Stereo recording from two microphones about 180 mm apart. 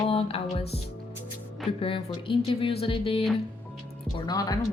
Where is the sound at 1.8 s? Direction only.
30° left (ahead or behind).